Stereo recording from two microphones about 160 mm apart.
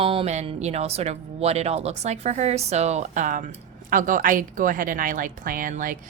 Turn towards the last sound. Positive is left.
turn(degrees=-55)  # may be behind; listen again after turning